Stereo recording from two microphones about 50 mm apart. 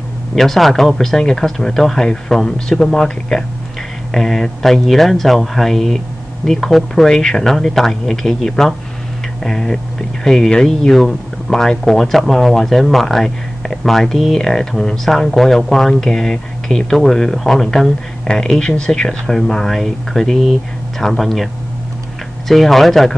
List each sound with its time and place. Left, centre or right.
0.4 s speech: centre
18.3 s speech: centre
22.5 s speech: centre